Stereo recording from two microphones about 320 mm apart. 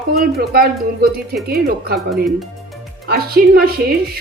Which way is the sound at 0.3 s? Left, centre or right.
Right.